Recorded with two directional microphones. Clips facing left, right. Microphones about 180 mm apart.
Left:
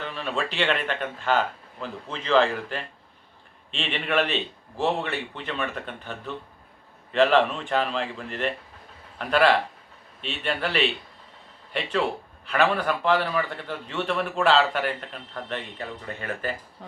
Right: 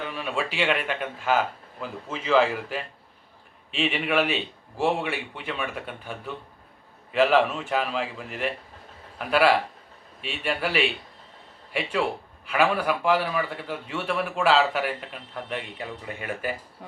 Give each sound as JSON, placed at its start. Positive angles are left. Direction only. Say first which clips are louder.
{"t": 0.0, "sound": "a man's voice", "louder": "even", "side_deg": -10}